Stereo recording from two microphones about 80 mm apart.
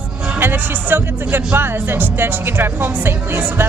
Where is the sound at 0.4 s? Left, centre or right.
Right.